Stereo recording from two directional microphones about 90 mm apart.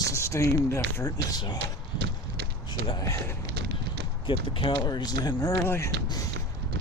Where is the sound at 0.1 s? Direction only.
35° left (ahead or behind).